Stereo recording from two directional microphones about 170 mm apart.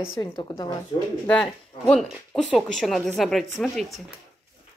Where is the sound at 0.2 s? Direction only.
25° left (ahead or behind).